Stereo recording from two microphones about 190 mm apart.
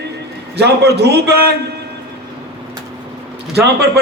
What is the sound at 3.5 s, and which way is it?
Speech, 60° right (ahead or behind).